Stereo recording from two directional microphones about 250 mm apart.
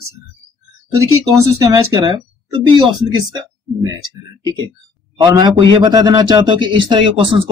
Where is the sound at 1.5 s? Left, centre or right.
Centre.